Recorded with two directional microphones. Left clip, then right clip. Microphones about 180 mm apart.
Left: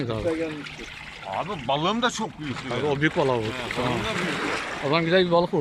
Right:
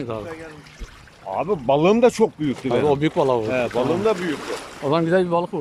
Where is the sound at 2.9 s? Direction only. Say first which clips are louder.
Right 1 dB; 20° right (ahead or behind).